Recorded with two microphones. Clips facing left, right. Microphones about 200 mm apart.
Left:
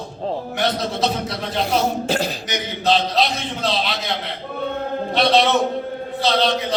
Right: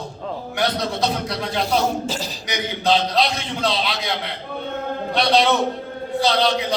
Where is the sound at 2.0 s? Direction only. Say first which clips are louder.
Left 5 dB; 60° left (ahead or behind).